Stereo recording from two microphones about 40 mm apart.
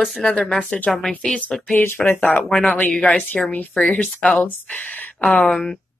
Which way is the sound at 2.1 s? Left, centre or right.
Left.